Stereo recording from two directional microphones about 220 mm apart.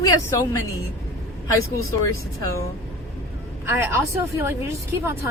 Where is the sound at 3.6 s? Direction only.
10° right (ahead or behind).